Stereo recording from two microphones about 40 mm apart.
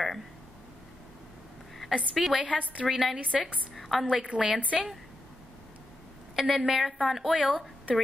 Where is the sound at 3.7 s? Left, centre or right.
Centre.